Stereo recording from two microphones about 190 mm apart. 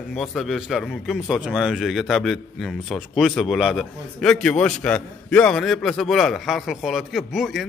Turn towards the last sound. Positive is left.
turn(degrees=0)  # may be behind; listen again after turning